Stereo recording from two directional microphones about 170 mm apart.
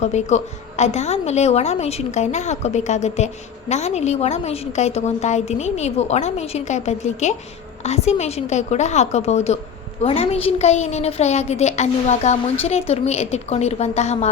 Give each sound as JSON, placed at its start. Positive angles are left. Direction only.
{"t": 0.0, "sound": "a woman's voice", "side_deg": 45}